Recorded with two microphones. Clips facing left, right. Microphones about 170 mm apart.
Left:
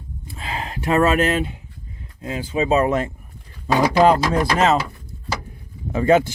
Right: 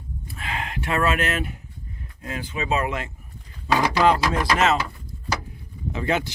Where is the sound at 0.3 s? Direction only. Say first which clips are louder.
Left 2 dB; 30° left (ahead or behind).